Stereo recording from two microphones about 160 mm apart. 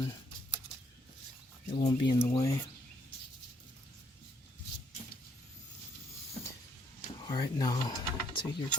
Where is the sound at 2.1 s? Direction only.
30° left (ahead or behind).